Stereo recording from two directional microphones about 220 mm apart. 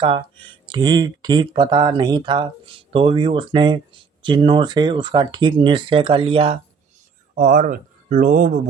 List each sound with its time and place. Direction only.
0.7 s speech: 20° right (ahead or behind)
7.3 s speech: 35° right (ahead or behind)